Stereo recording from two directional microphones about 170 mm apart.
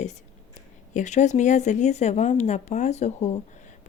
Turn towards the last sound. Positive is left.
turn(degrees=45)  # may be behind; listen again after turning